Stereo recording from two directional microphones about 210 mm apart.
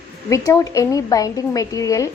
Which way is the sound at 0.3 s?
15° left (ahead or behind).